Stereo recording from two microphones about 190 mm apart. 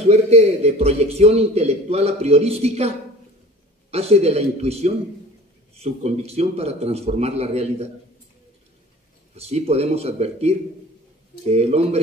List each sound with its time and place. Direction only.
0.1 s a man's voice: 35° right (ahead or behind)
3.9 s a man's voice: 35° right (ahead or behind)
9.5 s a man's voice: 35° right (ahead or behind)